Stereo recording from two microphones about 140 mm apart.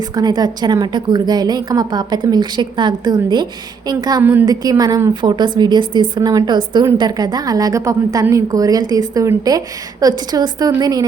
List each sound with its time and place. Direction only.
0.1 s a woman's voice: 30° right (ahead or behind)
4.2 s a woman's voice: 15° right (ahead or behind)
4.4 s a woman's voice: 25° right (ahead or behind)